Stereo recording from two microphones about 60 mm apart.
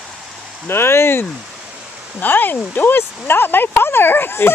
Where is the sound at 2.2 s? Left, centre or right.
Left.